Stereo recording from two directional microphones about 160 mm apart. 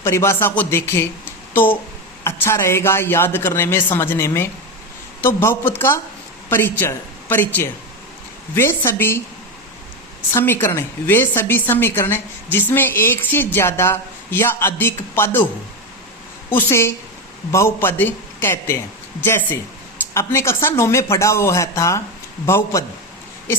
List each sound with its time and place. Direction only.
0.0 s a woman's voice: 15° left (ahead or behind)
10.3 s a woman's voice: 15° left (ahead or behind)
16.5 s a woman's voice: 15° left (ahead or behind)